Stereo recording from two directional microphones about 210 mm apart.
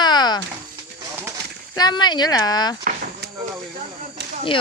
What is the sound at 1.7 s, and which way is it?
Speech, 20° left (ahead or behind).